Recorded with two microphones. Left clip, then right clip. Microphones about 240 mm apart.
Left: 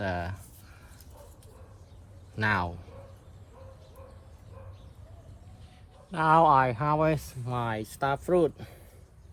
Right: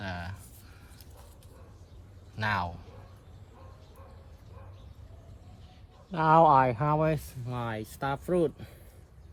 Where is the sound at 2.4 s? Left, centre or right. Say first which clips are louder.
Left 3 dB; centre.